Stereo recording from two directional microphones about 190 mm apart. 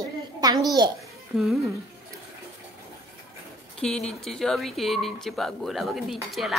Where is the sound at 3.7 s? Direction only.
5° left (ahead or behind).